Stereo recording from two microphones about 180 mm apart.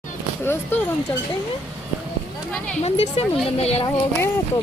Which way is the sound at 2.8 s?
35° left (ahead or behind).